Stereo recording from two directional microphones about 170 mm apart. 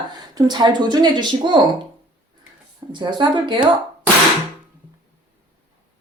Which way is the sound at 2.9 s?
25° right (ahead or behind).